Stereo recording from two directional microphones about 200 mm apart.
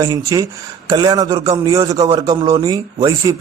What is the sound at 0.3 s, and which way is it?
A man's voice, 15° right (ahead or behind).